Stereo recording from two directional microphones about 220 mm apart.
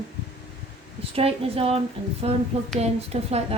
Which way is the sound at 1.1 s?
25° right (ahead or behind).